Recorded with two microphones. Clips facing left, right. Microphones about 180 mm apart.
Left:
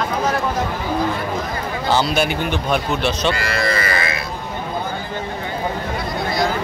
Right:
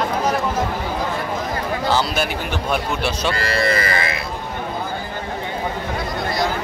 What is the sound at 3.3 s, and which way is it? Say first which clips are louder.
Speech: right 1 dB; 30° right (ahead or behind).